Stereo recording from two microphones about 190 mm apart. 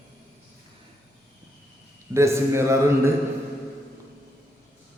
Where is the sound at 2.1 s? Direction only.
15° right (ahead or behind).